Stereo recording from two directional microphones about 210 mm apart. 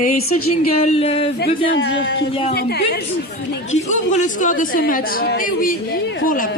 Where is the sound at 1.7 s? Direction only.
55° left (ahead or behind).